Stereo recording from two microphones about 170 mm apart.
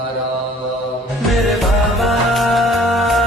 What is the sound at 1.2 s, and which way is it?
Music, centre (ahead or behind).